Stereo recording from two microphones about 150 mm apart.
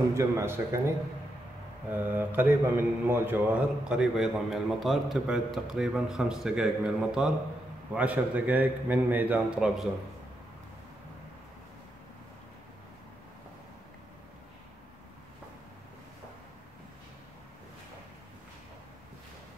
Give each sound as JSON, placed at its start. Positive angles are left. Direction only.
{"t": 0.1, "sound": "a man's voice", "side_deg": -20}